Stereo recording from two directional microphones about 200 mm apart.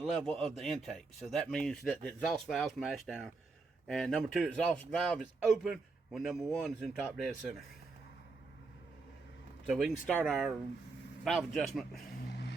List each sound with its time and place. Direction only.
0.0 s speech: centre (ahead or behind)
9.6 s speech: centre (ahead or behind)
12.3 s music: 55° left (ahead or behind)